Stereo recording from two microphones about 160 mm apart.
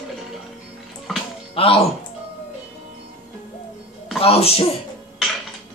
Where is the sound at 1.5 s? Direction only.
35° left (ahead or behind).